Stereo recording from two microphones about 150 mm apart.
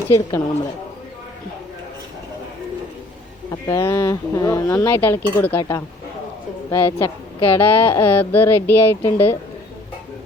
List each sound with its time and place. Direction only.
0.1 s speech: 25° left (ahead or behind)
3.7 s speech: 15° left (ahead or behind)
6.7 s a woman's voice: 15° left (ahead or behind)